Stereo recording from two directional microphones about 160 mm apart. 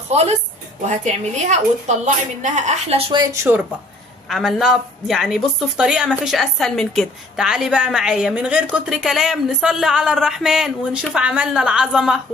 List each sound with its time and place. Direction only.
0.1 s a woman's voice: 40° right (ahead or behind)
4.3 s speech: centre (ahead or behind)